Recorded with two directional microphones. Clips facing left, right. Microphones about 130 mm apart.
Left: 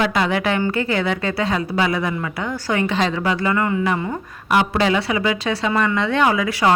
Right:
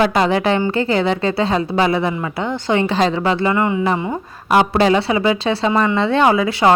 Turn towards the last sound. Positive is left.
turn(degrees=-30)  # may be behind; listen again after turning